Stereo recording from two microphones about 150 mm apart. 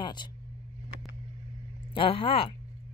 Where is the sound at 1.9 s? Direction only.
35° left (ahead or behind).